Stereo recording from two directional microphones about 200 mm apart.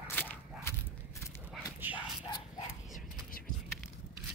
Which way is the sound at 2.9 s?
45° left (ahead or behind).